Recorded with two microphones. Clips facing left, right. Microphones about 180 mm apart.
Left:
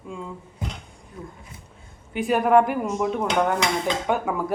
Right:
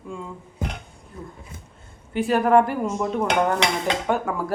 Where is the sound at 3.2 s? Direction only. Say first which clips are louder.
Right 2 dB; 65° right (ahead or behind).